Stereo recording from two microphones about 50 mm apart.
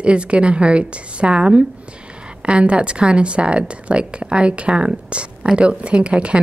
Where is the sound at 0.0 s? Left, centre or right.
Right.